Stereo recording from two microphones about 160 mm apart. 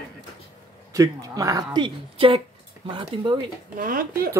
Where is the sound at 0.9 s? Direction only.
20° right (ahead or behind).